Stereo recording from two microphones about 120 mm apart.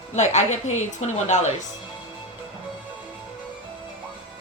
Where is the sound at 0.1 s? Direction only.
75° left (ahead or behind).